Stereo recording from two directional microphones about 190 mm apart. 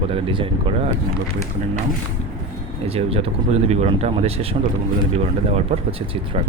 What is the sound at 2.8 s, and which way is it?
Speech, 30° right (ahead or behind).